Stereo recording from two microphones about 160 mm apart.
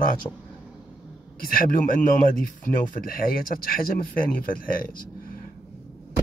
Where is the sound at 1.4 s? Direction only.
60° left (ahead or behind).